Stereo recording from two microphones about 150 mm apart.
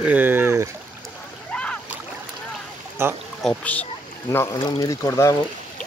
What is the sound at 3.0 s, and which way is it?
Speech, 15° right (ahead or behind).